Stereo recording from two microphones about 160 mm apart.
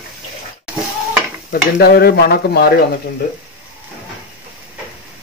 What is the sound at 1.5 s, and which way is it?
Stir, 75° left (ahead or behind).